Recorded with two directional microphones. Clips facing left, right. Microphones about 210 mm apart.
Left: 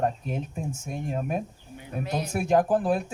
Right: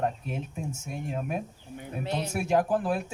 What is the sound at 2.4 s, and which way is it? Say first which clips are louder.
Speech: left 3 dB; 40° left (ahead or behind).